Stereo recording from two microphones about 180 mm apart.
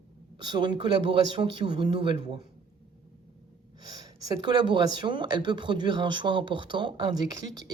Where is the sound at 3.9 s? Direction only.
20° right (ahead or behind).